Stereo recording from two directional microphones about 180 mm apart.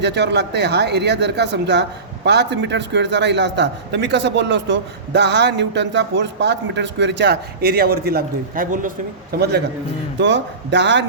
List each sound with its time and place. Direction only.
0.0 s speech: 70° right (ahead or behind); by 8.9 s 50° right (ahead or behind)
9.3 s a man's voice: 60° right (ahead or behind)
10.2 s speech: 80° right